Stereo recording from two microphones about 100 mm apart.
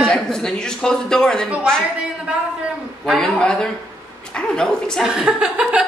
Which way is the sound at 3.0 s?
5° left (ahead or behind).